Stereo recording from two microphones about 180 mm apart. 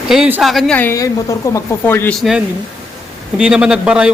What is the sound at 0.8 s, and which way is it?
A woman's voice, 15° left (ahead or behind).